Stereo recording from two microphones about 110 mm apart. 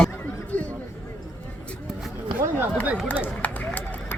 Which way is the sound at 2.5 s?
15° right (ahead or behind).